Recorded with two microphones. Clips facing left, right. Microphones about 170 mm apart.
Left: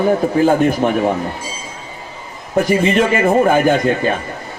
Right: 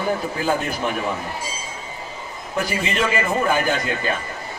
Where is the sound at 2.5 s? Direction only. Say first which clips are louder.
Left 10 dB; 50° left (ahead or behind).